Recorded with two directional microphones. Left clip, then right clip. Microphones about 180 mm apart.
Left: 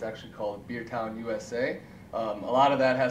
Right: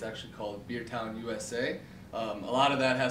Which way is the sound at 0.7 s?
50° right (ahead or behind).